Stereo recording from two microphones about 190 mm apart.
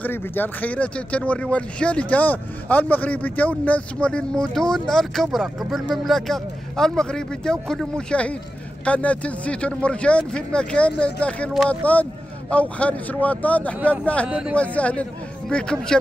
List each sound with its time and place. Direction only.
0.0 s speech: 10° left (ahead or behind)